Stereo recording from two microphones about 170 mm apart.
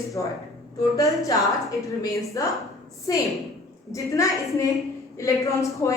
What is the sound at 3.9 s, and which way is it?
A woman's voice, 20° left (ahead or behind).